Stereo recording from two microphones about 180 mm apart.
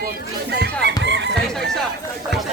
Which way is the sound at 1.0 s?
75° right (ahead or behind).